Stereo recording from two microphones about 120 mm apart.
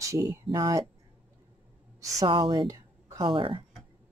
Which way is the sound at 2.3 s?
45° right (ahead or behind).